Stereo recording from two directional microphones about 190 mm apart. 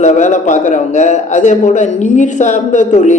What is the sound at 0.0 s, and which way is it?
Mantra, 40° left (ahead or behind).